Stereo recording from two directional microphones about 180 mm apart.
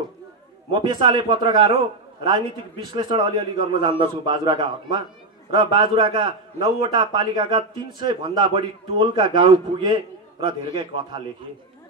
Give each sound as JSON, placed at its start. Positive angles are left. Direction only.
{"t": 0.7, "sound": "a man's voice", "side_deg": -25}